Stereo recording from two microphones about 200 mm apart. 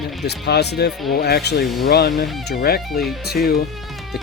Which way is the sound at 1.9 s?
50° left (ahead or behind).